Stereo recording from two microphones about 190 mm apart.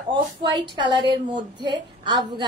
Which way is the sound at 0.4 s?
25° right (ahead or behind).